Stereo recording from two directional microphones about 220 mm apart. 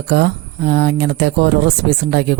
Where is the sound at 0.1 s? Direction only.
50° right (ahead or behind).